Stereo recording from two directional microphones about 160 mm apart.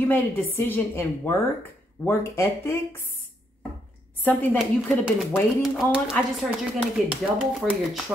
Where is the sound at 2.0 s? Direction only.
15° left (ahead or behind).